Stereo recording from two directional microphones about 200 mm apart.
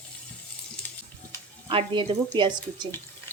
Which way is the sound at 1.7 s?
25° right (ahead or behind).